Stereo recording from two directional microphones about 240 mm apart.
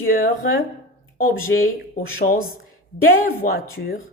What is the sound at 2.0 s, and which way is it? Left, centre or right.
Speech, left.